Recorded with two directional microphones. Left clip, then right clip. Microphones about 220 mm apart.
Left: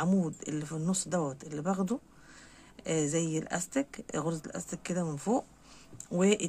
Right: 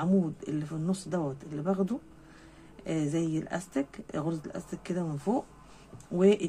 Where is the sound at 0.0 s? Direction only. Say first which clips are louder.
Right 2 dB; 30° left (ahead or behind).